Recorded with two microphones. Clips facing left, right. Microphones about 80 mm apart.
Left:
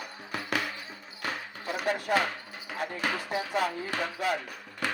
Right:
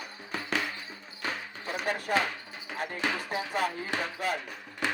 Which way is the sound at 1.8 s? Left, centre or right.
Left.